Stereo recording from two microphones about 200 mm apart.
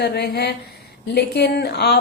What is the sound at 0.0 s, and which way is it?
A woman's voice, 55° left (ahead or behind).